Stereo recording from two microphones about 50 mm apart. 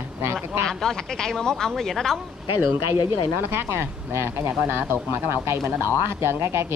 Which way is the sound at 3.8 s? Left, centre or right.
Right.